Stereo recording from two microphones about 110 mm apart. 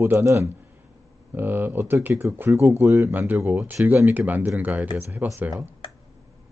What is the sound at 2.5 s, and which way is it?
Speech, 30° right (ahead or behind).